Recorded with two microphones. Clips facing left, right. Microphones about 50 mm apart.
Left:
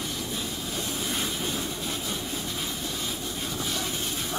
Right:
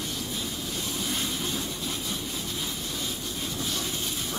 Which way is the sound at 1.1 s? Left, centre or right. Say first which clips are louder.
Left 1 dB; left.